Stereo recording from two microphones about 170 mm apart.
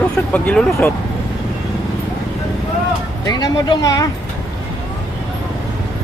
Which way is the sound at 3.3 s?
25° left (ahead or behind).